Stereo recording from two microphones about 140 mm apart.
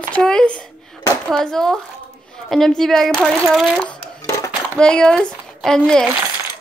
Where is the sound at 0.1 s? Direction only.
5° left (ahead or behind).